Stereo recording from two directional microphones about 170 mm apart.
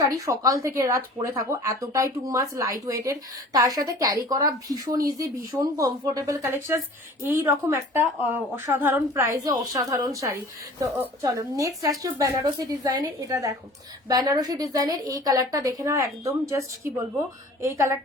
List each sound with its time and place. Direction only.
0.0 s a woman's voice: 20° right (ahead or behind)